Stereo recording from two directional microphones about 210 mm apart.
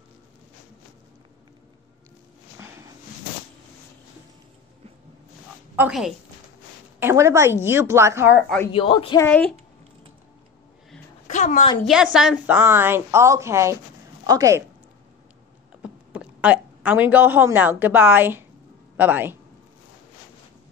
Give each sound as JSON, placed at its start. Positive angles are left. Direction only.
{"t": 5.8, "sound": "a woman's voice", "side_deg": -5}
{"t": 8.7, "sound": "a man's voice", "side_deg": 25}
{"t": 9.2, "sound": "speech", "side_deg": 5}
{"t": 11.2, "sound": "a sound", "side_deg": 35}
{"t": 11.8, "sound": "a woman's voice", "side_deg": -5}
{"t": 15.8, "sound": "a woman's voice", "side_deg": -5}